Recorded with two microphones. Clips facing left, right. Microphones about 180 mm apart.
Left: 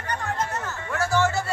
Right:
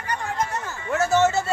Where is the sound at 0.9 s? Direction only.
25° right (ahead or behind).